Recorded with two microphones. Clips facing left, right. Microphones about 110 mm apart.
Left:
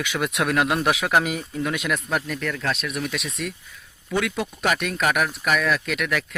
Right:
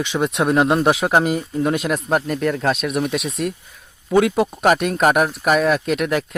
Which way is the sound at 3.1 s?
35° right (ahead or behind).